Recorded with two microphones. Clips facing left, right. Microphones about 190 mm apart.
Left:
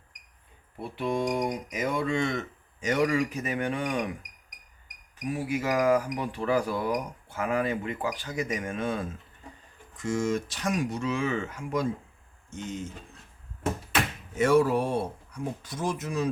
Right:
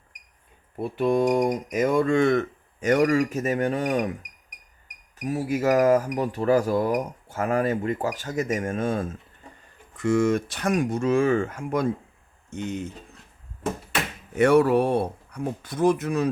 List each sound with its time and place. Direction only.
0.8 s speech: 45° right (ahead or behind)
5.2 s speech: 40° right (ahead or behind)
9.9 s speech: 65° right (ahead or behind)
14.3 s speech: 65° right (ahead or behind)